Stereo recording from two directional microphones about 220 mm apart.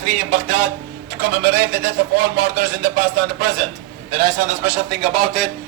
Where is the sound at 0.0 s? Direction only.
35° right (ahead or behind).